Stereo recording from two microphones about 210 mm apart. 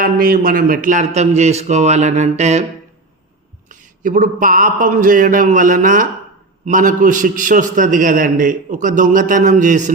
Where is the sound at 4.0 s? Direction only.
40° right (ahead or behind).